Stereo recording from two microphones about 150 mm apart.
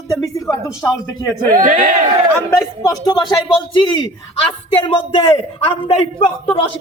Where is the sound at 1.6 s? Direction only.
65° right (ahead or behind).